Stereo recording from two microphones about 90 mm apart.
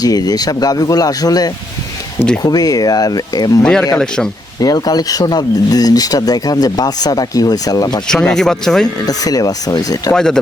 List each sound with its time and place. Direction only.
0.0 s speech: 45° left (ahead or behind)
3.6 s speech: 10° left (ahead or behind)
4.6 s speech: 45° left (ahead or behind)
8.0 s speech: 5° left (ahead or behind)
9.0 s speech: 45° left (ahead or behind)
10.1 s speech: 5° left (ahead or behind)